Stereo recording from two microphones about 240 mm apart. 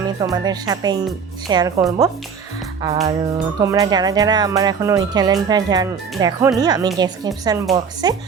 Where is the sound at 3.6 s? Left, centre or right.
Centre.